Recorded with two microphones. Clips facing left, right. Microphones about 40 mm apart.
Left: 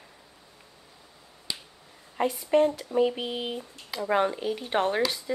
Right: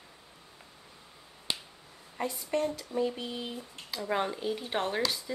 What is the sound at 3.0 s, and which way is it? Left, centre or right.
Speech, left.